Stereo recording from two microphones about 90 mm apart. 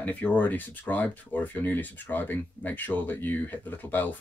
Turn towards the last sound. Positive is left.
turn(degrees=20)  # may be behind; listen again after turning